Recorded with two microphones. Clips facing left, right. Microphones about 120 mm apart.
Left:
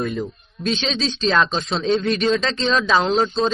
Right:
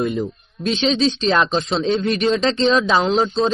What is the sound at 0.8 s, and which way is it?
Speech, 15° right (ahead or behind).